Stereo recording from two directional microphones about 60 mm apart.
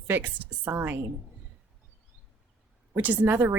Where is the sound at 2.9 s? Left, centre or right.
Right.